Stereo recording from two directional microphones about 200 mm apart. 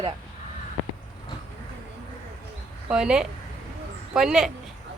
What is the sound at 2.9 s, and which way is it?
Speech, 5° right (ahead or behind).